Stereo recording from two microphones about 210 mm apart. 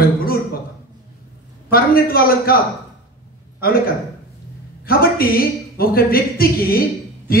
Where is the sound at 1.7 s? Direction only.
45° left (ahead or behind).